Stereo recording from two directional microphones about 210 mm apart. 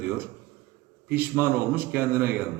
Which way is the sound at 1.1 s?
10° right (ahead or behind).